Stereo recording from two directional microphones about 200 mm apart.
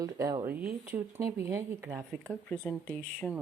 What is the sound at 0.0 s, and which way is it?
Speech, 20° right (ahead or behind).